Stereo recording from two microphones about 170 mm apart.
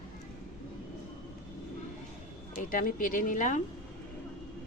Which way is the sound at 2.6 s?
55° left (ahead or behind).